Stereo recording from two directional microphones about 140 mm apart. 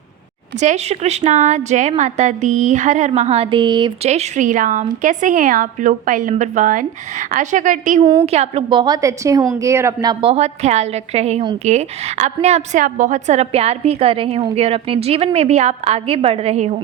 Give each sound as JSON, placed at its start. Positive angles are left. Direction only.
{"t": 0.6, "sound": "speech", "side_deg": -55}
{"t": 3.1, "sound": "a woman's voice", "side_deg": -50}
{"t": 4.0, "sound": "a woman's voice", "side_deg": -50}
{"t": 8.2, "sound": "a woman's voice", "side_deg": -50}
{"t": 8.7, "sound": "a woman's voice", "side_deg": -30}
{"t": 12.8, "sound": "a woman's voice", "side_deg": -65}